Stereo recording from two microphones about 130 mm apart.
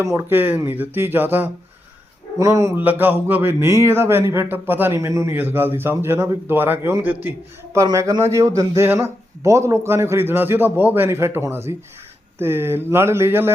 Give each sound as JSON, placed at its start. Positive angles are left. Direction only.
{"t": 0.0, "sound": "a man's voice", "side_deg": -25}